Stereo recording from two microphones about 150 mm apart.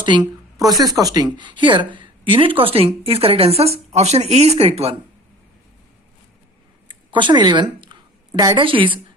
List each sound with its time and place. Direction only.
0.0 s speech: 30° right (ahead or behind)
6.8 s a woman's voice: 35° right (ahead or behind)